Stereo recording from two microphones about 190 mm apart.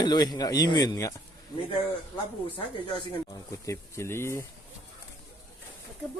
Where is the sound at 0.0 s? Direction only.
20° left (ahead or behind).